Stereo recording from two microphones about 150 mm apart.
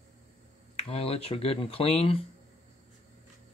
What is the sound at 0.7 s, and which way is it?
Speech, 40° left (ahead or behind).